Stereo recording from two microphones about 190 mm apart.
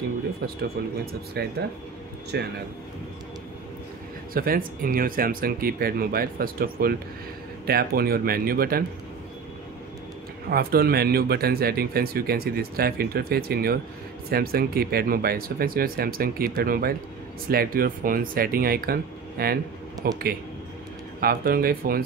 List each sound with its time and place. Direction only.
1.4 s speech: 60° right (ahead or behind)
4.3 s speech: 50° right (ahead or behind)
10.5 s speech: 55° right (ahead or behind)